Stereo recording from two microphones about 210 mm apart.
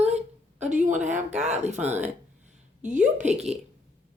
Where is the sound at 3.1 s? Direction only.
35° right (ahead or behind).